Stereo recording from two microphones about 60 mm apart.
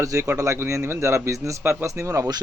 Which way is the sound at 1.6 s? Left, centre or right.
Right.